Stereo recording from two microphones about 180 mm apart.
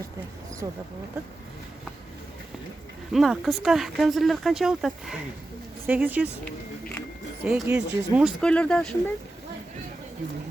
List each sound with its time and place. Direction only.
0.6 s speech: 20° right (ahead or behind)
3.1 s speech: centre (ahead or behind)
7.4 s speech: 5° right (ahead or behind)
8.4 s speech: 5° left (ahead or behind)